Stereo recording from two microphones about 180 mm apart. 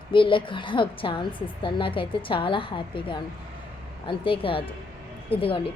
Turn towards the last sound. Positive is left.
turn(degrees=30)  # may be behind; listen again after turning